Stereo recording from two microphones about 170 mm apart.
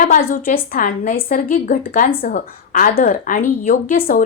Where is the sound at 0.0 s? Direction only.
55° left (ahead or behind).